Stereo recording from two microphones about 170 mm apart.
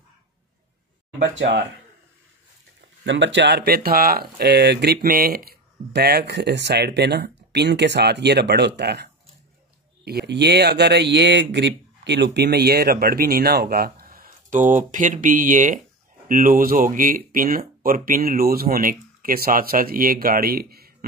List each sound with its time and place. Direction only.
3.0 s speech: 90° right; by 20.9 s 65° right (ahead or behind)